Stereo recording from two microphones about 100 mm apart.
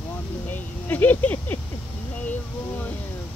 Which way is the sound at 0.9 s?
15° left (ahead or behind).